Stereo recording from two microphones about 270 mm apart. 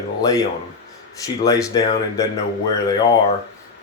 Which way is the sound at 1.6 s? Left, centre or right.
Centre.